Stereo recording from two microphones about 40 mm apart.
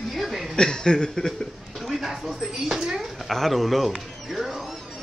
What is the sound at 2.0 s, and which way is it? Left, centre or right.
Speech, centre.